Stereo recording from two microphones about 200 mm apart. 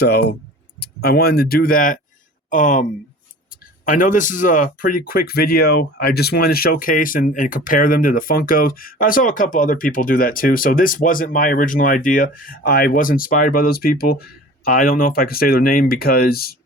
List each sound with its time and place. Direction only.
0.0 s speech: 55° left (ahead or behind)